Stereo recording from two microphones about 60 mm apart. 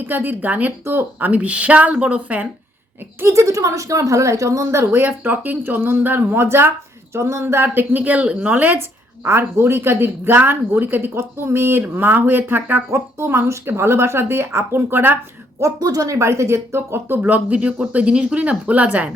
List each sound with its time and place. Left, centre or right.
0.0 s a woman's voice: right
0.9 s a woman's voice: right
1.3 s speech: right
3.2 s speech: right
7.4 s speech: right
9.2 s a woman's voice: right
11.8 s a woman's voice: right
12.9 s speech: right
15.6 s speech: right
17.2 s speech: right